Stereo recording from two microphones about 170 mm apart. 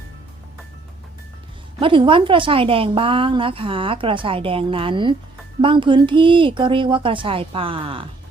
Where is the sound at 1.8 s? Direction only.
30° right (ahead or behind).